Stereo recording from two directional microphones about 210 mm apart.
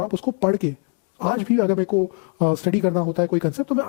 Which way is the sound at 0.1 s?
10° left (ahead or behind).